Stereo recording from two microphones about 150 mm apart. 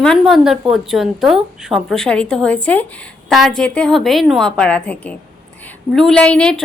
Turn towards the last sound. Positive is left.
turn(degrees=5)  # may be behind; listen again after turning